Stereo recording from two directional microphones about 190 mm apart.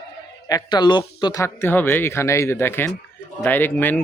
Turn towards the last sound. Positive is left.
turn(degrees=10)  # may be behind; listen again after turning